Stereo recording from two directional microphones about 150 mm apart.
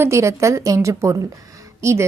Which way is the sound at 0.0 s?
20° right (ahead or behind).